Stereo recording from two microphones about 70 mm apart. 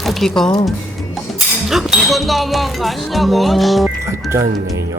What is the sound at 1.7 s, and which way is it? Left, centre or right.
Speech, centre.